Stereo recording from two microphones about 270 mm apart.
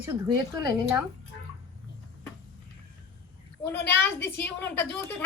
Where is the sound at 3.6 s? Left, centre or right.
Centre.